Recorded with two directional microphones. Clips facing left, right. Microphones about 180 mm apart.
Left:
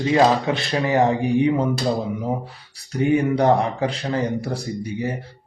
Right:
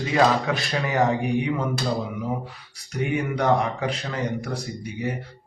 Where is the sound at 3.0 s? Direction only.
30° left (ahead or behind).